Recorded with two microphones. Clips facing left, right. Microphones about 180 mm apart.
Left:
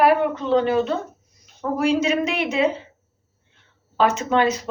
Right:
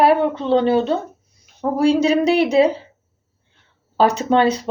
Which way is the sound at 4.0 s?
35° right (ahead or behind).